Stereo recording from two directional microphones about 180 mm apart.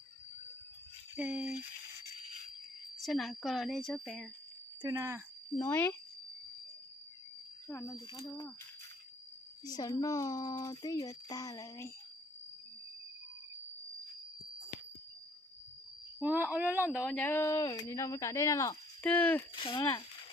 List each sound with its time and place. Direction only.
1.1 s speech: 10° right (ahead or behind)
3.0 s a woman's voice: centre (ahead or behind)
4.8 s speech: 20° right (ahead or behind)
5.5 s speech: 15° left (ahead or behind)
7.7 s speech: 20° left (ahead or behind)
9.6 s speech: 20° left (ahead or behind)
16.2 s speech: 10° right (ahead or behind)
16.9 s speech: 5° left (ahead or behind)
19.0 s speech: 10° left (ahead or behind)
19.5 s speech: 25° left (ahead or behind)